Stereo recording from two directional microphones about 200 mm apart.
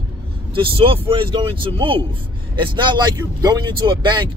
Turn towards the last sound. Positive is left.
turn(degrees=-25)  # may be behind; listen again after turning